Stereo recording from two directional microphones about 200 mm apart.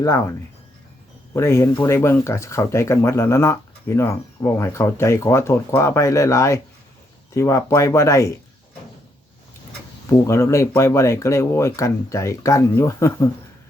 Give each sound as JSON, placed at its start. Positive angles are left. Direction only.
{"t": 0.0, "sound": "speech", "side_deg": 15}
{"t": 10.1, "sound": "speech", "side_deg": 15}